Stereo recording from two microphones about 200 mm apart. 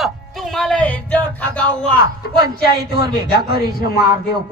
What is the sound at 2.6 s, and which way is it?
Speech, 50° left (ahead or behind).